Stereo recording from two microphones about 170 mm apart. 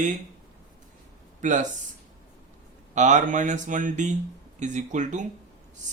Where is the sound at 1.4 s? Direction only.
45° right (ahead or behind).